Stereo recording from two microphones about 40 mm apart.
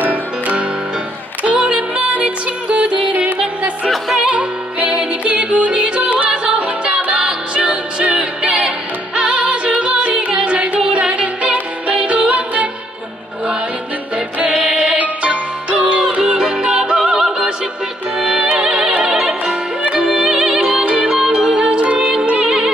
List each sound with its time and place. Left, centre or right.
0.0 s music: right
1.4 s music: right
4.3 s music: right
6.0 s music: right
6.4 s music: right
14.5 s music: centre
14.8 s music: right
17.0 s opera: centre
18.2 s music: right
20.1 s music: centre
20.8 s music: right
21.4 s music: centre